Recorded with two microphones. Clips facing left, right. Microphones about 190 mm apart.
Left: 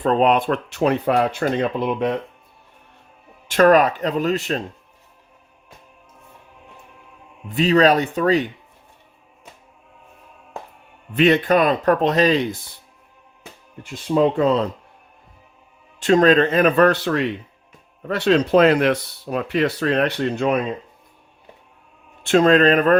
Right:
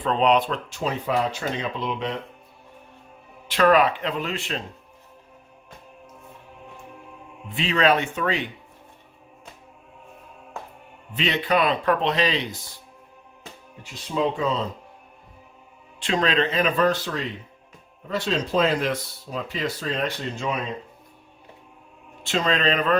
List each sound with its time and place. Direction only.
0.0 s speech: 45° left (ahead or behind)
3.5 s speech: 45° left (ahead or behind)
7.4 s speech: 40° left (ahead or behind)
11.1 s speech: 50° left (ahead or behind)
13.8 s speech: 55° left (ahead or behind)
16.0 s speech: 45° left (ahead or behind); by 20.6 s 60° left (ahead or behind)
22.3 s speech: 50° left (ahead or behind)